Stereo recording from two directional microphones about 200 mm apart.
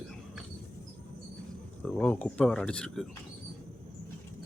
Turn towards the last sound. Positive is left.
turn(degrees=5)  # may be behind; listen again after turning